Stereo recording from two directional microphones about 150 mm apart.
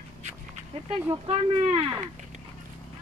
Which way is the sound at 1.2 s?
40° right (ahead or behind).